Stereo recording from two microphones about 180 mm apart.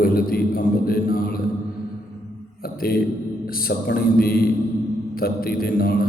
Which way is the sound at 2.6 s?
55° left (ahead or behind).